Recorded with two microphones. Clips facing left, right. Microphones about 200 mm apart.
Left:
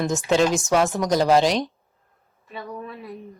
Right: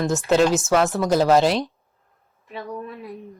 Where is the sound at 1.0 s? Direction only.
15° left (ahead or behind).